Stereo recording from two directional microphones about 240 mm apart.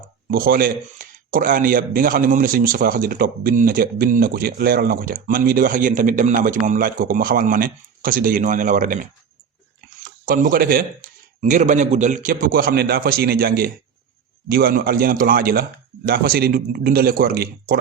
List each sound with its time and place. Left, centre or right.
0.3 s speech: right